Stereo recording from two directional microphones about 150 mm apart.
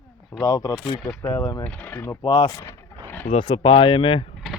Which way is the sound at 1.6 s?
10° left (ahead or behind).